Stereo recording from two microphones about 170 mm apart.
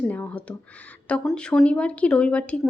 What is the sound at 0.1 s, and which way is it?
A woman's voice, 10° left (ahead or behind).